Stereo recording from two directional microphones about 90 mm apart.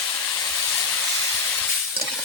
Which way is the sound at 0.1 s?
10° left (ahead or behind).